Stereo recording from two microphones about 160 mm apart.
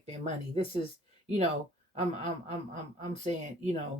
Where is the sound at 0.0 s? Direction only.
40° right (ahead or behind).